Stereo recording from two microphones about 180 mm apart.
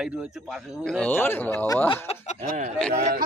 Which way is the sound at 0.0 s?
5° right (ahead or behind).